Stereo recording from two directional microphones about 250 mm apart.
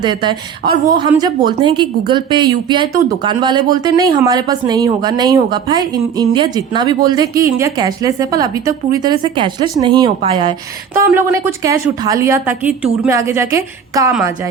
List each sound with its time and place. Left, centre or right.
0.0 s a woman's voice: centre